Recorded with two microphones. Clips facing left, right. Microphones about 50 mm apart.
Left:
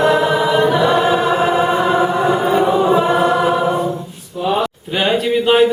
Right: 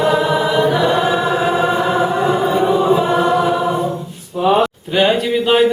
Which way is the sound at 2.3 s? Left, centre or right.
Left.